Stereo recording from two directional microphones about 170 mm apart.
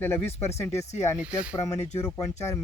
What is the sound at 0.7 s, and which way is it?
Speech, 40° left (ahead or behind).